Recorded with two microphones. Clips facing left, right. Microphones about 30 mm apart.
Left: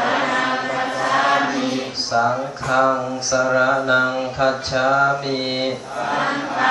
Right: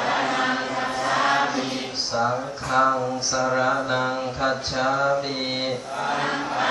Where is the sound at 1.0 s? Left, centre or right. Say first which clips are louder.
Left 4 dB; left.